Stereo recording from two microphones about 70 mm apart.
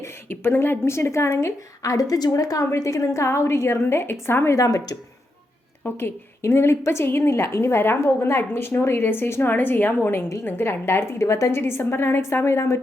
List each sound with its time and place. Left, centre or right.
0.0 s a woman's voice: left
4.5 s speech: left
5.8 s a woman's voice: left